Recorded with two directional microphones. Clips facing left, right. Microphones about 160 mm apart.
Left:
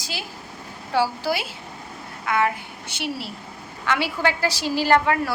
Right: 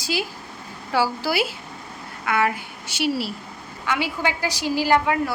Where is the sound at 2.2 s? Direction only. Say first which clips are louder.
Even; 75° right (ahead or behind).